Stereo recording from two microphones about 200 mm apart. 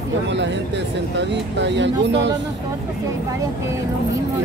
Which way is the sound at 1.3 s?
60° right (ahead or behind).